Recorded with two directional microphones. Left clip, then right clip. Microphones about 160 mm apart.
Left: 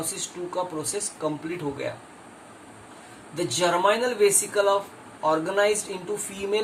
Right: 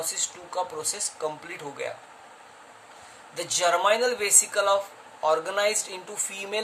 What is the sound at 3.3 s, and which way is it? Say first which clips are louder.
Speech: even; 45° right (ahead or behind).